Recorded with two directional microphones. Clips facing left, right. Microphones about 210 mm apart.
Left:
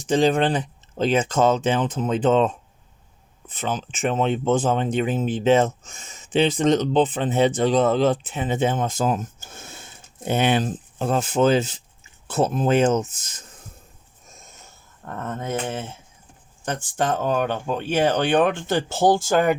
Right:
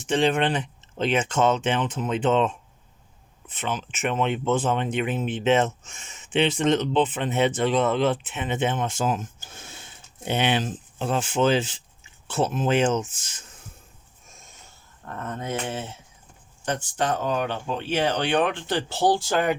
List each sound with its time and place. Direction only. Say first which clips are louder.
0.1 s speech: left 3 dB; 35° left (ahead or behind)
15.0 s speech: left 3 dB; 45° left (ahead or behind)
16.6 s speech: left 2 dB; 50° left (ahead or behind)